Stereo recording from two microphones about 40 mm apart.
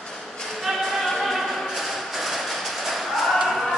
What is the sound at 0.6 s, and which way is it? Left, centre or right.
Music, centre.